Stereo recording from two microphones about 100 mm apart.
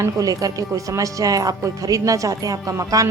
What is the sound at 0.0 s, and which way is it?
Speech, 35° right (ahead or behind).